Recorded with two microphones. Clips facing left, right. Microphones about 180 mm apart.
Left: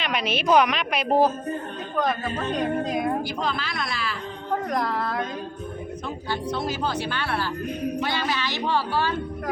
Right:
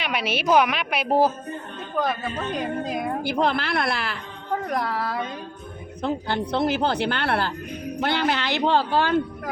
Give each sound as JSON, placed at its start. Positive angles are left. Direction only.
{"t": 0.0, "sound": "a woman's voice", "side_deg": -5}
{"t": 3.2, "sound": "speech", "side_deg": -60}
{"t": 4.6, "sound": "a woman's voice", "side_deg": -5}
{"t": 6.0, "sound": "speech", "side_deg": -60}